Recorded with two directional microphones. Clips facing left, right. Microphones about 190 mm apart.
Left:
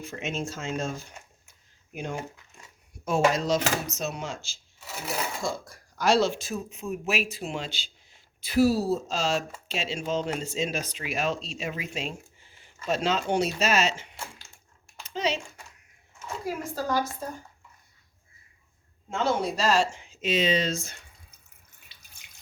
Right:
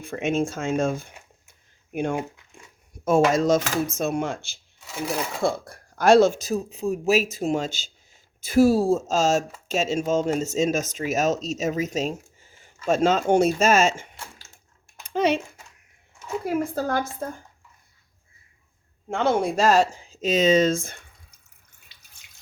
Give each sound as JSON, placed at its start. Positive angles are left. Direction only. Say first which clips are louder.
{"t": 0.0, "sound": "speech", "louder": "right 8 dB", "side_deg": -55}
{"t": 3.0, "sound": "speech", "louder": "right 5 dB", "side_deg": -50}
{"t": 15.0, "sound": "a sound", "louder": "right 7 dB", "side_deg": -55}
{"t": 16.5, "sound": "speech", "louder": "right 5 dB", "side_deg": -60}
{"t": 19.1, "sound": "speech", "louder": "right 5 dB", "side_deg": -55}